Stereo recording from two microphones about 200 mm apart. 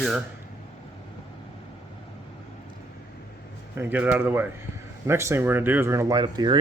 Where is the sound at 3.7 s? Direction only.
10° right (ahead or behind).